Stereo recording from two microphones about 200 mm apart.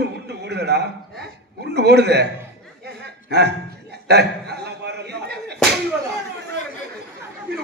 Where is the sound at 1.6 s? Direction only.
55° right (ahead or behind).